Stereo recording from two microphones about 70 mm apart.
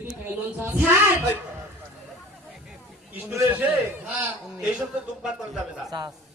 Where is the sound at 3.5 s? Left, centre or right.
Right.